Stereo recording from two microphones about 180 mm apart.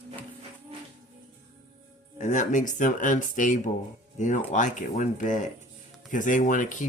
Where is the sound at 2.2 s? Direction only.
45° left (ahead or behind).